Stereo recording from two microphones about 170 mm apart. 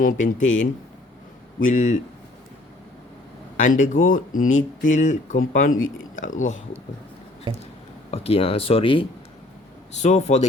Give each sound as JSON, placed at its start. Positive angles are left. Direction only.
{"t": 0.0, "sound": "speech", "side_deg": 50}
{"t": 3.6, "sound": "speech", "side_deg": 50}
{"t": 7.5, "sound": "a sound", "side_deg": -30}
{"t": 8.1, "sound": "speech", "side_deg": 35}
{"t": 10.0, "sound": "speech", "side_deg": 40}